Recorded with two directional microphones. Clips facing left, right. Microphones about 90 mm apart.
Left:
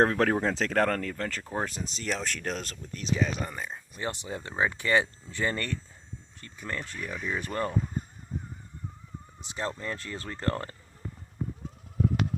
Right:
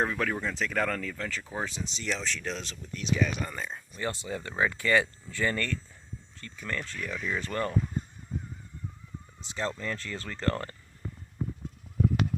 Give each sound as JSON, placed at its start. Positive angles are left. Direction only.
{"t": 0.0, "sound": "speech", "side_deg": 70}
{"t": 3.5, "sound": "speech", "side_deg": 10}
{"t": 9.4, "sound": "speech", "side_deg": 20}